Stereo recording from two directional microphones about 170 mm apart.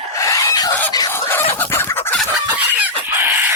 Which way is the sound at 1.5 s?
10° left (ahead or behind).